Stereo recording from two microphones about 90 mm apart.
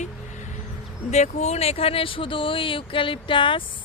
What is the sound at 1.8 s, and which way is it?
Speech, 90° left.